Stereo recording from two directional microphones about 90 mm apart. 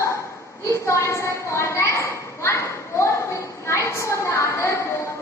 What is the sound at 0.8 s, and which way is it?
A woman's voice, 30° left (ahead or behind).